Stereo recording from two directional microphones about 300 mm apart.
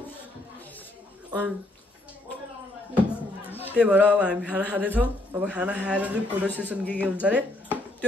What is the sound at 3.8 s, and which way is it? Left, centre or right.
Speech, centre.